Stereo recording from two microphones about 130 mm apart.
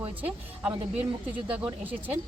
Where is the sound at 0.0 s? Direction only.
10° right (ahead or behind).